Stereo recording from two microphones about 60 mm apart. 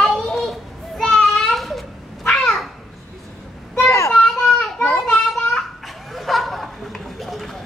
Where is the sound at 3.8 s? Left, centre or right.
Left.